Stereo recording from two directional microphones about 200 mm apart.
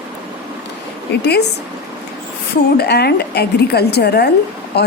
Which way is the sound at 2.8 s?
55° left (ahead or behind).